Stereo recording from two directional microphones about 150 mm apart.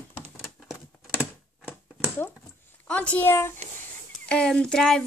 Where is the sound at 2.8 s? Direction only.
10° left (ahead or behind).